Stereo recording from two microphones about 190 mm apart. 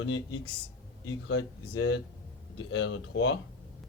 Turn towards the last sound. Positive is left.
turn(degrees=80)